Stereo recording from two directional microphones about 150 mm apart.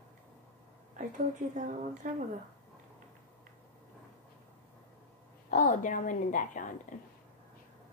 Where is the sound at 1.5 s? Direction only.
60° right (ahead or behind).